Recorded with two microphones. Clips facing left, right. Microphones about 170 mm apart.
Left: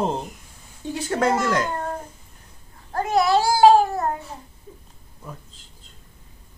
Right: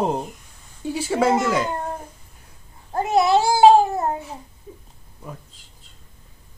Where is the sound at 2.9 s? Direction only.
20° right (ahead or behind).